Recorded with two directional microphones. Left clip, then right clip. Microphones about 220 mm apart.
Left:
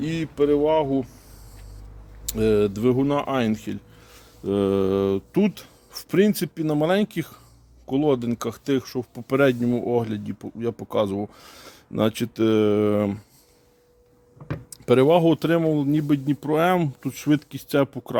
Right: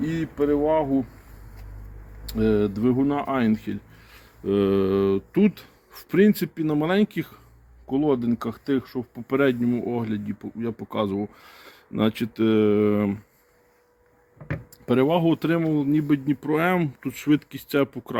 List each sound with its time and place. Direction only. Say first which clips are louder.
0.0 s speech: left 2 dB; 45° left (ahead or behind)
2.2 s speech: left 2 dB; 45° left (ahead or behind)
14.8 s speech: left 4 dB; 40° left (ahead or behind)